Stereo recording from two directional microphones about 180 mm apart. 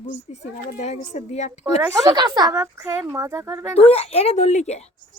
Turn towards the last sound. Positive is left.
turn(degrees=35)  # may be behind; listen again after turning